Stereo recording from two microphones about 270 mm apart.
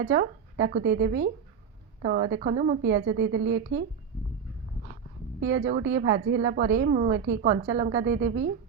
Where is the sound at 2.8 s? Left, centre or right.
Right.